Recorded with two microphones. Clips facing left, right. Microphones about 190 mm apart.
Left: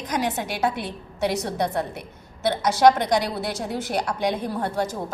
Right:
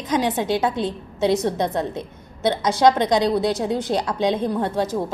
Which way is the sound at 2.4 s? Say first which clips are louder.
Even; 20° right (ahead or behind).